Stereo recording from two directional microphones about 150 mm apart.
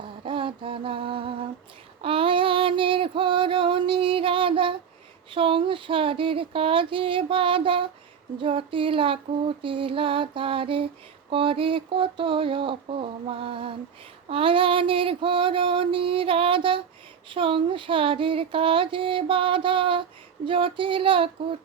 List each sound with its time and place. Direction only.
0.3 s mantra: 35° right (ahead or behind)
2.0 s female singing: 35° right (ahead or behind)
5.3 s a sound: 35° right (ahead or behind)